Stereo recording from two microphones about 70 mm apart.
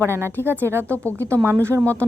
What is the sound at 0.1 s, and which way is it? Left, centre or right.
Speech, right.